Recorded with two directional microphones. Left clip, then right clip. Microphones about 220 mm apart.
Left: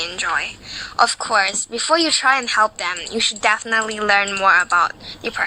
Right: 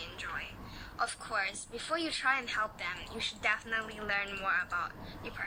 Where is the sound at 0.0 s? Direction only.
40° left (ahead or behind).